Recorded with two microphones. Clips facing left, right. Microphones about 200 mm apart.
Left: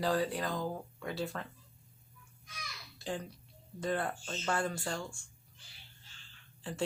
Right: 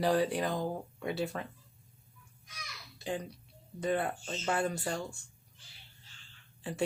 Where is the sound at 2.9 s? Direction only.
15° right (ahead or behind).